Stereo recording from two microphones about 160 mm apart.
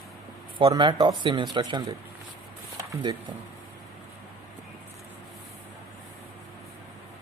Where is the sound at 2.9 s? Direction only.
25° right (ahead or behind).